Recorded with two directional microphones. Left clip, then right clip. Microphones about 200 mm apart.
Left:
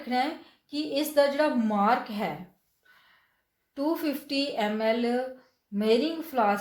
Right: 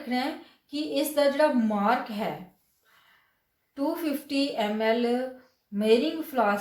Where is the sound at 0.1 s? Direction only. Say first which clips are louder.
Left 3 dB; 40° left (ahead or behind).